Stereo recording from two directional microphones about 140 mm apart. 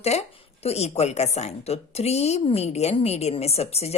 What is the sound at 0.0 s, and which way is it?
Speech, 50° left (ahead or behind).